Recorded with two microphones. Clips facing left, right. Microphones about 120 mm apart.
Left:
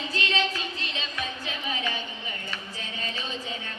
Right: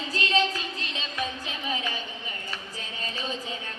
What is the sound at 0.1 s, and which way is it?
Music, 40° right (ahead or behind).